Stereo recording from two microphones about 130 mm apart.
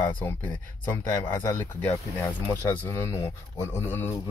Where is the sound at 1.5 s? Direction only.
15° left (ahead or behind).